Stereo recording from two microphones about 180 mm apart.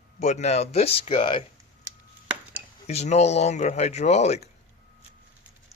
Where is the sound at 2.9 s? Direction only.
35° left (ahead or behind).